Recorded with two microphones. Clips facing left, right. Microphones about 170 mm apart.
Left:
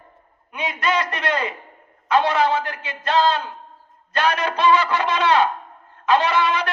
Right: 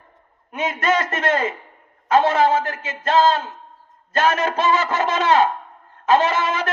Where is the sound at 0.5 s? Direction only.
45° right (ahead or behind).